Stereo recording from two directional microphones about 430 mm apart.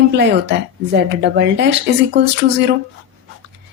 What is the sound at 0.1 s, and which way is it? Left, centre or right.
A woman's voice, right.